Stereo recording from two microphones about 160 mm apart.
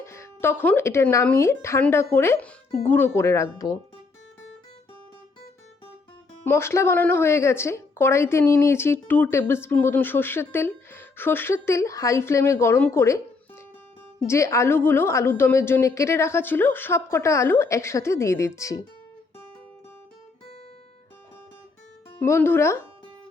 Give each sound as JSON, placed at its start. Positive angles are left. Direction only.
{"t": 0.0, "sound": "speech", "side_deg": 15}
{"t": 6.4, "sound": "speech", "side_deg": 15}
{"t": 14.3, "sound": "speech", "side_deg": 20}
{"t": 22.2, "sound": "speech", "side_deg": 15}